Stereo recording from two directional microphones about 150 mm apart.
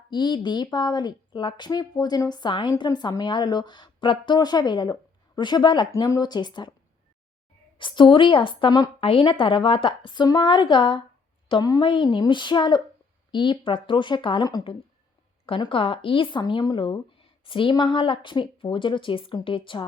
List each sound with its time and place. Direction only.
0.1 s speech: 30° left (ahead or behind)
7.8 s speech: 35° left (ahead or behind)